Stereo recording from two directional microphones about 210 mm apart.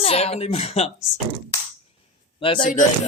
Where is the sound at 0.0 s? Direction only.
30° left (ahead or behind).